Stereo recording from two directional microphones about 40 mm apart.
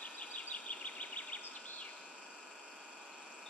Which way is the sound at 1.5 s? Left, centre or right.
Left.